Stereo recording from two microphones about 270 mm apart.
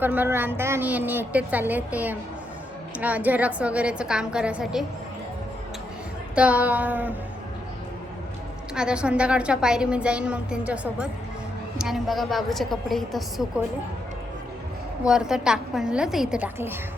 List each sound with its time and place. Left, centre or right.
0.0 s a woman's voice: centre
6.3 s a woman's voice: centre
8.7 s a woman's voice: centre
15.0 s a woman's voice: centre